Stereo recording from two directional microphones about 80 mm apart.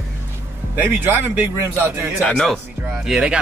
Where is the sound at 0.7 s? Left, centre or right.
Right.